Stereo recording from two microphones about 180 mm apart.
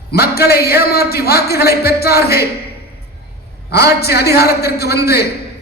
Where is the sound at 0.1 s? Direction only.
60° left (ahead or behind).